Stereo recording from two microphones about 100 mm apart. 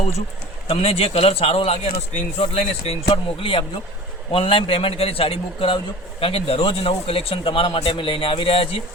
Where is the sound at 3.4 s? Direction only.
60° left (ahead or behind).